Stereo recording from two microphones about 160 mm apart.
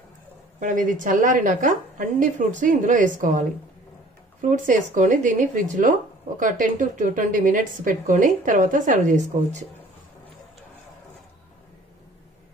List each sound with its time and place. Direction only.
0.6 s a woman's voice: 55° right (ahead or behind)